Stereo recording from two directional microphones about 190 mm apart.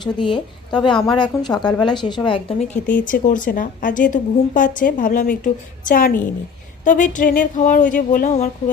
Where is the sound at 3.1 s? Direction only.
45° left (ahead or behind).